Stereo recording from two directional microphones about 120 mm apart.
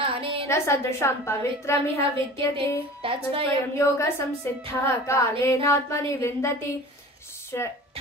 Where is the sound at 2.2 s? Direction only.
45° right (ahead or behind).